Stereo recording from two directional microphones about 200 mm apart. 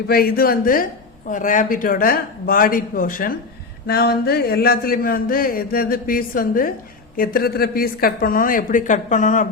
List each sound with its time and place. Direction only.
0.1 s speech: 50° left (ahead or behind)